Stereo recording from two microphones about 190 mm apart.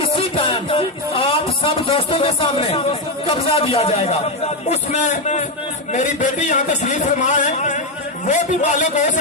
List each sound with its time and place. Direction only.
0.0 s a man's voice: 25° left (ahead or behind)